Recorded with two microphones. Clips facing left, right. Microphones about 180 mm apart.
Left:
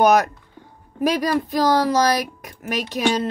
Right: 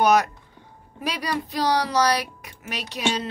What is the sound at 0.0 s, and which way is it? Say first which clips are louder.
A woman's voice: left 3 dB; 45° left (ahead or behind).